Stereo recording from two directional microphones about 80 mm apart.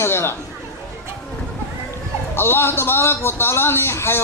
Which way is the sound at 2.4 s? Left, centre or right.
Left.